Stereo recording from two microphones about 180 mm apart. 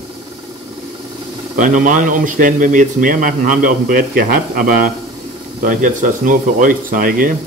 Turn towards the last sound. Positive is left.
turn(degrees=-50)  # may be behind; listen again after turning